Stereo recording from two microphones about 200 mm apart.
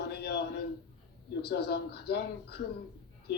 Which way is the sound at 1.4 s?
55° left (ahead or behind).